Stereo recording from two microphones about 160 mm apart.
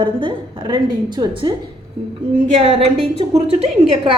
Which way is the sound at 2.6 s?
35° right (ahead or behind).